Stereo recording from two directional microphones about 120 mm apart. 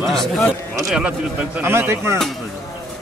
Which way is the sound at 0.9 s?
10° right (ahead or behind).